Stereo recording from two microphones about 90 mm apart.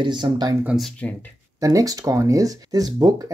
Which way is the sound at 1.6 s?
40° right (ahead or behind).